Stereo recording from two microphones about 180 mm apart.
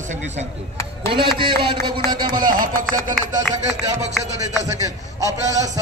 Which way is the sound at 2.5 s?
50° right (ahead or behind).